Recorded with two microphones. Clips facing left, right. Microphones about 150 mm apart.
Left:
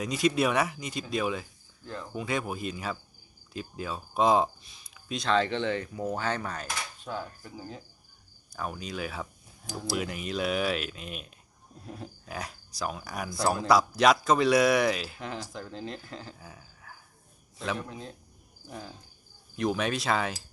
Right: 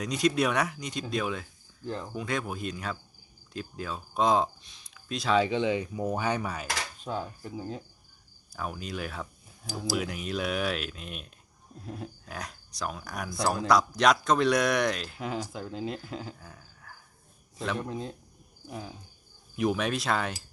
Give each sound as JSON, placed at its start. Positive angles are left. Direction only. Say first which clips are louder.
{"t": 0.0, "sound": "speech", "louder": "even", "side_deg": 5}
{"t": 7.0, "sound": "cricket", "louder": "right 2 dB", "side_deg": -20}
{"t": 8.5, "sound": "speech", "louder": "even", "side_deg": 0}
{"t": 15.2, "sound": "speech", "louder": "right 3 dB", "side_deg": -10}
{"t": 16.4, "sound": "a sound", "louder": "left 1 dB", "side_deg": 5}
{"t": 18.7, "sound": "speech", "louder": "right 2 dB", "side_deg": -5}